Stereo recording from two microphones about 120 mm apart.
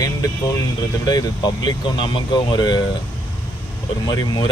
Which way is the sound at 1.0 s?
35° left (ahead or behind).